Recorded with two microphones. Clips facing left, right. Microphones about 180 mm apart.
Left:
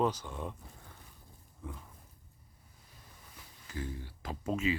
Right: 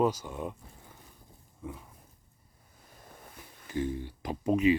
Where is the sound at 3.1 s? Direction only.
55° right (ahead or behind).